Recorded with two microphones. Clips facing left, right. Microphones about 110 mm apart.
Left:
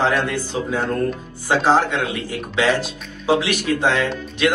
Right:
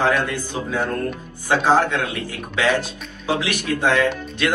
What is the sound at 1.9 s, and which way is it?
Speech, 15° left (ahead or behind).